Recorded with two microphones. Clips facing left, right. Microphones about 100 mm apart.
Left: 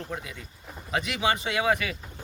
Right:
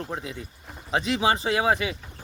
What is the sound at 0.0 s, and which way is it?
Speech, 30° right (ahead or behind).